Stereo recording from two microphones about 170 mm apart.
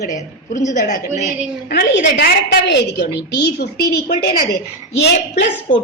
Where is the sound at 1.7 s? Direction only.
75° left (ahead or behind).